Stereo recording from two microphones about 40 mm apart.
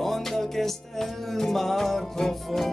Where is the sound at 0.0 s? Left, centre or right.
Centre.